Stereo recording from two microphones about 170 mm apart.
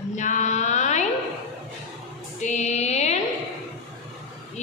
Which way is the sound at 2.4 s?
40° left (ahead or behind).